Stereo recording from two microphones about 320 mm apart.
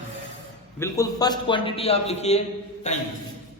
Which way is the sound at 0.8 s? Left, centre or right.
Centre.